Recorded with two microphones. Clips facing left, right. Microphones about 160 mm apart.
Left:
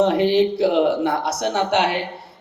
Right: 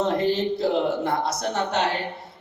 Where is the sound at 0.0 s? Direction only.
70° left (ahead or behind).